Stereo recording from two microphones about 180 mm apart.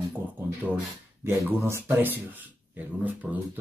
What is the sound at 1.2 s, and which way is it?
Speech, 15° right (ahead or behind).